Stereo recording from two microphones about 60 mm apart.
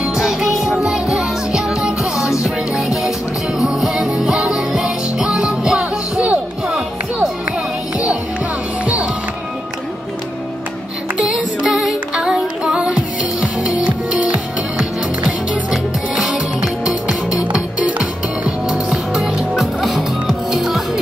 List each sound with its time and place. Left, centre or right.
0.0 s music: centre
3.5 s music: centre
8.8 s music: right
11.1 s music: centre
15.7 s music: centre; by 18.5 s right
18.7 s music: centre